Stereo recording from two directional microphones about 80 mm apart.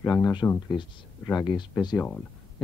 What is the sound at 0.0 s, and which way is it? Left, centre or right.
Speech, left.